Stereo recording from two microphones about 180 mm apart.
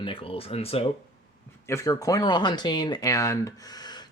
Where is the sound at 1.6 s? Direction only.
15° left (ahead or behind).